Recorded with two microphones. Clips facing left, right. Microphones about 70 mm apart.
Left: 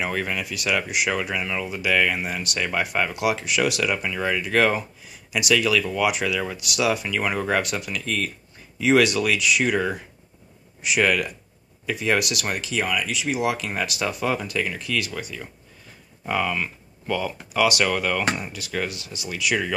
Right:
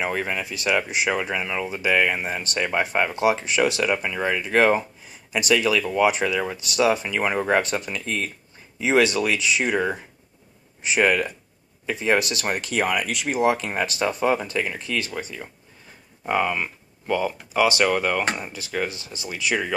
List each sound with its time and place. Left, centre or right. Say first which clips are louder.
0.0 s speech: right 1 dB; right
12.6 s speech: right 2 dB; right
13.4 s speech: right 7 dB; right